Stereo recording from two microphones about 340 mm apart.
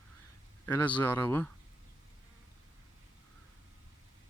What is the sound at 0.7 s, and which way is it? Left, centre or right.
Speech, centre.